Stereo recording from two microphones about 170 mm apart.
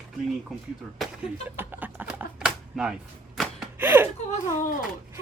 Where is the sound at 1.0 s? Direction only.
10° right (ahead or behind).